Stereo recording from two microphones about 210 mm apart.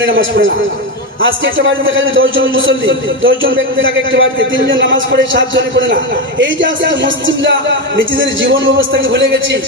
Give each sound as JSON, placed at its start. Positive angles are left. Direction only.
{"t": 0.0, "sound": "a man's voice", "side_deg": -65}